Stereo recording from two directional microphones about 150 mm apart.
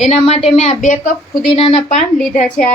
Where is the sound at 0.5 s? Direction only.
45° left (ahead or behind).